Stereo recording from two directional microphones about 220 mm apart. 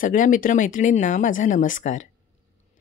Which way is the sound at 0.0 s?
35° left (ahead or behind).